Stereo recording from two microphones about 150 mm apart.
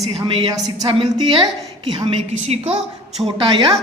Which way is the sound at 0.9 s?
35° right (ahead or behind).